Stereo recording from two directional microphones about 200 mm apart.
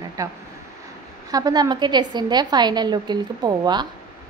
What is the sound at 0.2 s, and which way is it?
A woman's voice, 15° right (ahead or behind).